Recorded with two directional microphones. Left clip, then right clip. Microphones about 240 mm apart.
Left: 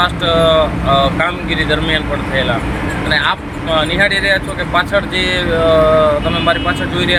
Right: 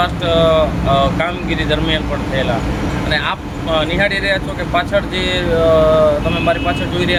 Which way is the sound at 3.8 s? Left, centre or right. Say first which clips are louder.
Left 3 dB; centre.